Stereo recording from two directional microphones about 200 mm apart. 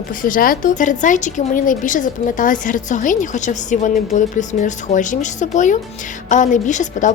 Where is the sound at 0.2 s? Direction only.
45° left (ahead or behind).